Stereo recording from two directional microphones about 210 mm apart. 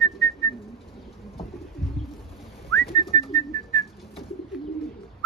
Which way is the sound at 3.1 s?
15° left (ahead or behind).